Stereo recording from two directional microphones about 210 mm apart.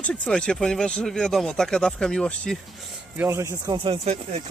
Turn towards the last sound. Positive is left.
turn(degrees=-25)  # may be behind; listen again after turning